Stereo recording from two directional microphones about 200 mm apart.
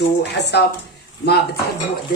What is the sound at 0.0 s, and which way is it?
Speech, 60° left (ahead or behind).